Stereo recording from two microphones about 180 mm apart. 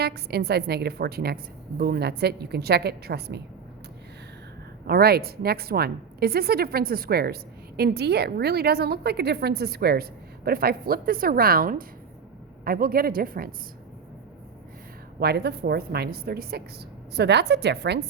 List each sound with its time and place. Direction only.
0.0 s a woman's voice: 65° right (ahead or behind)
4.9 s a woman's voice: 60° right (ahead or behind)
15.2 s a woman's voice: 65° right (ahead or behind)